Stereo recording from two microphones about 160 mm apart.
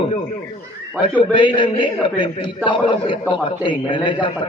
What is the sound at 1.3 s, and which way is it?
A man's voice, 30° left (ahead or behind).